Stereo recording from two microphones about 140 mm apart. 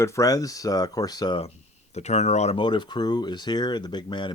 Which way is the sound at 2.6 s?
35° left (ahead or behind).